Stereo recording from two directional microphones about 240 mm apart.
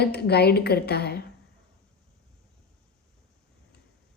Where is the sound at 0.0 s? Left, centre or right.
Left.